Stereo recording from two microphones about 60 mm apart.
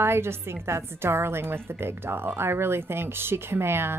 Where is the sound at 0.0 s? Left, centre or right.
Right.